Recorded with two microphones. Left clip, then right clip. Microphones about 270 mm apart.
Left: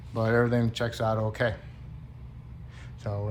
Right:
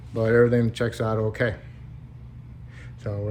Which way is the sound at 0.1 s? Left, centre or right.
Centre.